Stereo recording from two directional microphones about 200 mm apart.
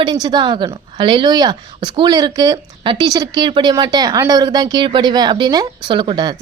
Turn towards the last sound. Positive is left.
turn(degrees=-25)  # may be behind; listen again after turning